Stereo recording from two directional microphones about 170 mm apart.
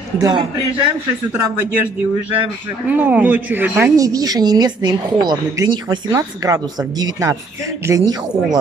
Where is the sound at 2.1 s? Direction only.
10° right (ahead or behind).